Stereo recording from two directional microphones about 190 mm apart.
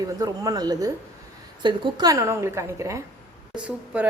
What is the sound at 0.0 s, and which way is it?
A woman's voice, 20° right (ahead or behind).